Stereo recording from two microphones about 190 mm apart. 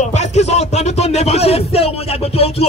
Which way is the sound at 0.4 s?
35° left (ahead or behind).